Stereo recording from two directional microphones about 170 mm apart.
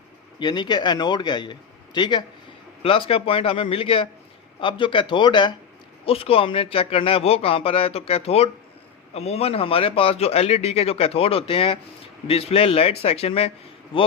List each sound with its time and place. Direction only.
0.3 s a man's voice: 25° left (ahead or behind)